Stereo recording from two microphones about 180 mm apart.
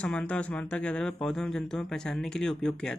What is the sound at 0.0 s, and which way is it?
Speech, 5° left (ahead or behind).